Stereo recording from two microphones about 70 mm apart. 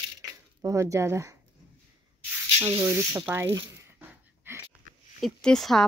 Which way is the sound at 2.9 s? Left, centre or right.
Centre.